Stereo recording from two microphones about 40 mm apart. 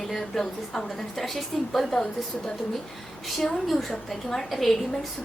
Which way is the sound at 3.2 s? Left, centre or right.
Centre.